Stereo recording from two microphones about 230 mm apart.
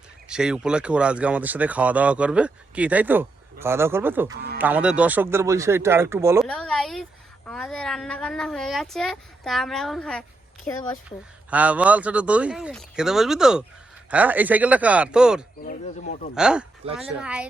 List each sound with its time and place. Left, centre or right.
0.3 s speech: centre
6.4 s a woman's voice: centre
10.7 s speech: centre
11.5 s speech: centre
15.6 s speech: left
16.3 s speech: centre
16.8 s speech: right
17.2 s speech: centre